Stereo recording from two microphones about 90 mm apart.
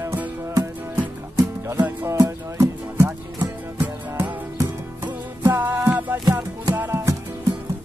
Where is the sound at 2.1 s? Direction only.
35° right (ahead or behind).